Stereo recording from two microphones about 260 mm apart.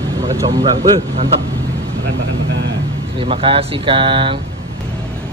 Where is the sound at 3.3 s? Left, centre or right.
Right.